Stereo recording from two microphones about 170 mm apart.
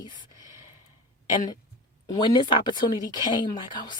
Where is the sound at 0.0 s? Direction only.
25° left (ahead or behind).